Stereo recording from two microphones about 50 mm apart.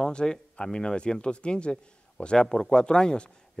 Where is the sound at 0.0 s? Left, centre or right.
Centre.